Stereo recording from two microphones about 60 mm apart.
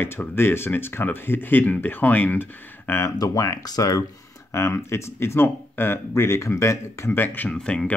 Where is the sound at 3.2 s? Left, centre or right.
Left.